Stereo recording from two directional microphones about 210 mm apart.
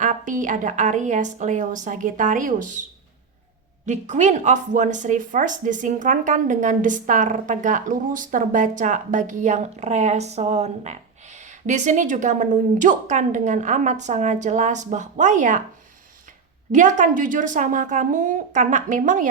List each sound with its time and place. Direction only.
0.0 s a woman's voice: 40° right (ahead or behind)
3.8 s a woman's voice: 35° right (ahead or behind)
16.7 s a woman's voice: 35° right (ahead or behind)